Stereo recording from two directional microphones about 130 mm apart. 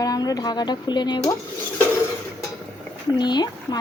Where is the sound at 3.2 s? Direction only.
35° left (ahead or behind).